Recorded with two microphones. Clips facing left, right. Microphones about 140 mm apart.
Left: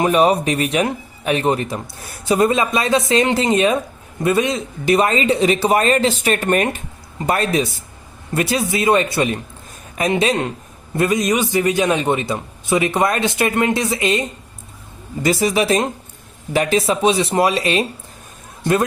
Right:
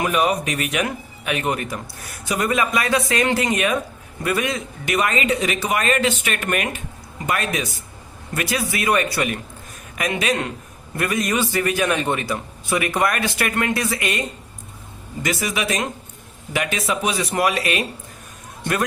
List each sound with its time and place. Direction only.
0.0 s a man's voice: 30° left (ahead or behind)